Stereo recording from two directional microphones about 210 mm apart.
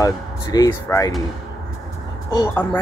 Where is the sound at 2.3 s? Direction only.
10° left (ahead or behind).